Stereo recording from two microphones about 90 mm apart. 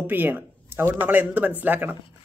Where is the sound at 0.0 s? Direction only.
20° right (ahead or behind).